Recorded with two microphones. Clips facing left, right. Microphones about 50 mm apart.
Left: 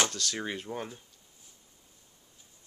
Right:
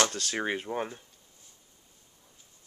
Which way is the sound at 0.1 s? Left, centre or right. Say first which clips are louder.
Right 4 dB; right.